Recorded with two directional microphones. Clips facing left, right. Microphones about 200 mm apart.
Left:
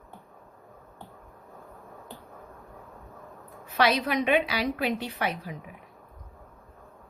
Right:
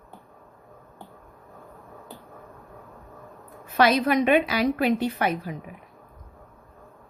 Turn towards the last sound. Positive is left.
turn(degrees=-50)  # may be behind; listen again after turning